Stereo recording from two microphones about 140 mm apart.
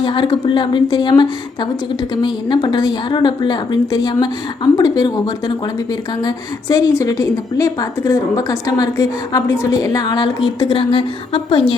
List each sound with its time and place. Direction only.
0.0 s a woman's voice: 35° left (ahead or behind)